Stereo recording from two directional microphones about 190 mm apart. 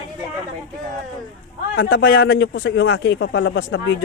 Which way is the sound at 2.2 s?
90° left.